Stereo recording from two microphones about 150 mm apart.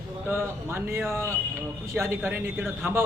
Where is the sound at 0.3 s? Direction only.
15° right (ahead or behind).